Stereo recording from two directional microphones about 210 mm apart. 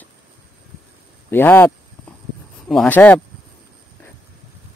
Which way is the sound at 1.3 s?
10° left (ahead or behind).